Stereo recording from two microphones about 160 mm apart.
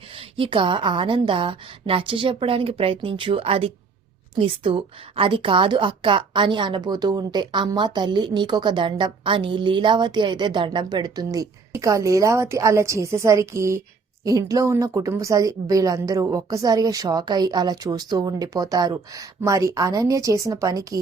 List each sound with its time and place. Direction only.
0.2 s a woman's voice: 35° right (ahead or behind)